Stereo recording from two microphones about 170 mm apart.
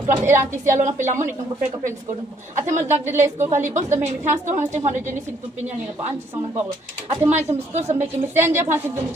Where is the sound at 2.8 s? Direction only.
15° right (ahead or behind).